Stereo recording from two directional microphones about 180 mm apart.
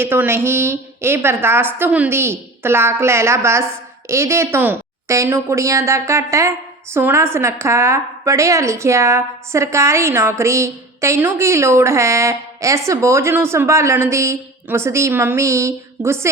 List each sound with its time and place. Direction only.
0.0 s a woman's voice: 10° right (ahead or behind)